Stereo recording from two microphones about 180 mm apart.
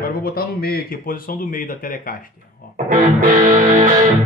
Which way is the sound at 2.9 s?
50° right (ahead or behind).